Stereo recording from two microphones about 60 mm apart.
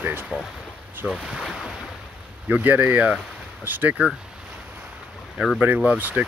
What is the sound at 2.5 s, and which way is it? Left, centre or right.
Speech, right.